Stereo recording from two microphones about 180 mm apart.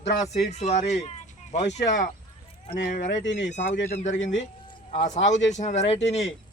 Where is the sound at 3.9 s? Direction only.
40° left (ahead or behind).